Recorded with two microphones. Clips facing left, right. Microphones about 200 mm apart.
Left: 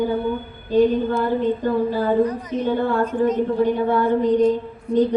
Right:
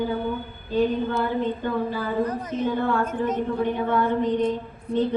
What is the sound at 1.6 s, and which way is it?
Speech, 40° left (ahead or behind).